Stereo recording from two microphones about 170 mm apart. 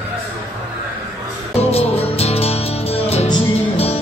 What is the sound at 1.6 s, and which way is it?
Music, 35° left (ahead or behind).